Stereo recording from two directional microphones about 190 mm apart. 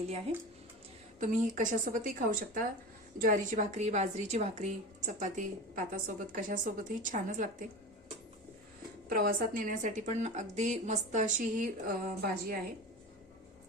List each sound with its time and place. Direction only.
1.2 s a woman's voice: 40° right (ahead or behind)
9.0 s a woman's voice: 50° right (ahead or behind)